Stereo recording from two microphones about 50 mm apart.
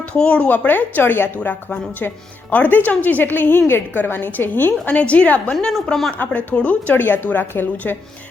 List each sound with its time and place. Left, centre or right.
0.2 s a woman's voice: left
0.4 s speech: left
4.9 s a woman's voice: left
5.6 s speech: centre
6.1 s speech: left
6.9 s a woman's voice: left